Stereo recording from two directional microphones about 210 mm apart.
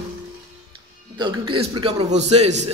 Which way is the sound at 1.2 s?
20° right (ahead or behind).